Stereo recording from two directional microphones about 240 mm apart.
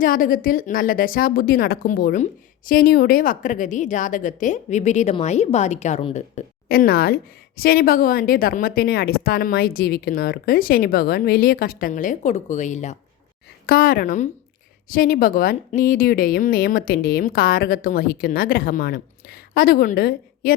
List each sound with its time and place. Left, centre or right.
0.0 s a woman's voice: left